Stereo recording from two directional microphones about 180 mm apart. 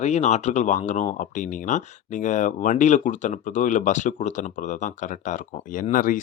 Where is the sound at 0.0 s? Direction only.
40° left (ahead or behind).